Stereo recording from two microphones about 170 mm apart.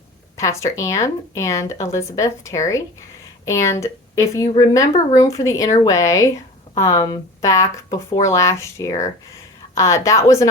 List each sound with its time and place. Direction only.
0.3 s speech: 20° left (ahead or behind)